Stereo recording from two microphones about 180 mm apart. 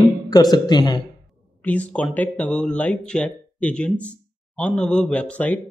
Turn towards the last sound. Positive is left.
turn(degrees=5)  # may be behind; listen again after turning